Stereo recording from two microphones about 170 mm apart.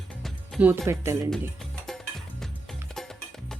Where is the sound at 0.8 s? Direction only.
15° right (ahead or behind).